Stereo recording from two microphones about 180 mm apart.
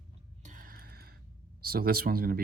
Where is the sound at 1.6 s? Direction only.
55° right (ahead or behind).